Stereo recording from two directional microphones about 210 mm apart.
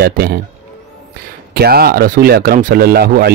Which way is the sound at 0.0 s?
45° right (ahead or behind).